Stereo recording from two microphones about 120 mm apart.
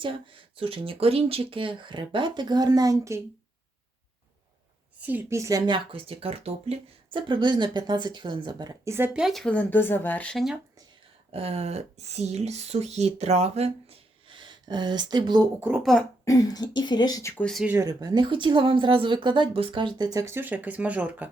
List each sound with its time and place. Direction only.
0.0 s speech: 45° right (ahead or behind); by 3.2 s 25° right (ahead or behind)
4.9 s a sound: 15° right (ahead or behind)
5.3 s speech: 25° right (ahead or behind)
9.1 s speech: centre (ahead or behind)
10.3 s speech: 5° right (ahead or behind)
11.3 s speech: 55° right (ahead or behind)
14.3 s speech: 40° right (ahead or behind)
15.8 s speech: 5° left (ahead or behind)
16.2 s speech: 30° left (ahead or behind)
17.3 s speech: 5° left (ahead or behind)
17.7 s speech: 35° right (ahead or behind); by 21.2 s 10° right (ahead or behind)